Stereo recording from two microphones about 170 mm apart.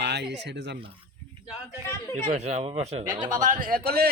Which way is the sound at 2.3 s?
40° right (ahead or behind).